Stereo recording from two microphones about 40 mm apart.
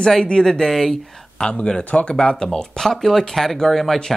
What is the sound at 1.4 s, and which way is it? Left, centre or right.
Speech, left.